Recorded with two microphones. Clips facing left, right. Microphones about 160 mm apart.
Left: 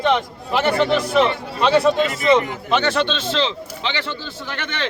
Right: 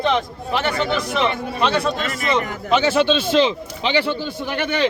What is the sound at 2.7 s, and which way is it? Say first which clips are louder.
A man's voice: right 4 dB; 5° right (ahead or behind).